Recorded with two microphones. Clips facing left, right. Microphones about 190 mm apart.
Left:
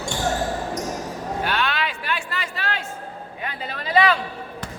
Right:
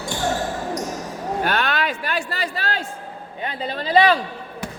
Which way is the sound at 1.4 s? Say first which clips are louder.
Right 3 dB; 45° right (ahead or behind).